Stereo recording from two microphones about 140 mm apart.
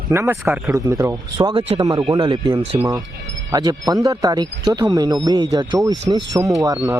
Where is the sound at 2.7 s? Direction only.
20° right (ahead or behind).